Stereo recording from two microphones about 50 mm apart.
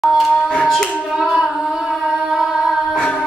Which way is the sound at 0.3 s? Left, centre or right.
Left.